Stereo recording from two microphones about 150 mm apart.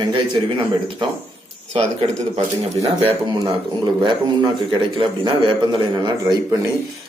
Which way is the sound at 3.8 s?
30° right (ahead or behind).